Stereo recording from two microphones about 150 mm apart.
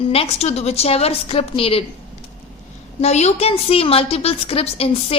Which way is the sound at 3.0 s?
45° left (ahead or behind).